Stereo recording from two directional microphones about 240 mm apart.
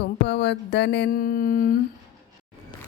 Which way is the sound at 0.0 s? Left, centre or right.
Left.